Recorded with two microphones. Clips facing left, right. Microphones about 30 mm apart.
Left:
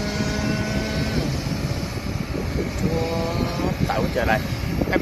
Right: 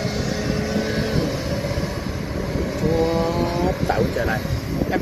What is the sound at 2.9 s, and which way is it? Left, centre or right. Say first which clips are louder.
Vehicle: right 6 dB; centre.